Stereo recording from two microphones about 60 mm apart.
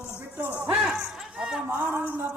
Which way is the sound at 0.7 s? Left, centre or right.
Centre.